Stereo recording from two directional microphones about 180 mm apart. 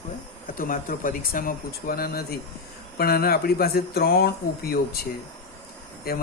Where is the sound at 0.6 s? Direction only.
50° left (ahead or behind).